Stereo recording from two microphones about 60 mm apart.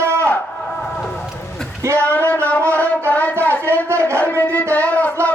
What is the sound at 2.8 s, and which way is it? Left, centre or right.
Music, left.